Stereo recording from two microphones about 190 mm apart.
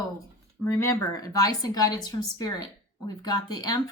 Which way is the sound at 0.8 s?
15° left (ahead or behind).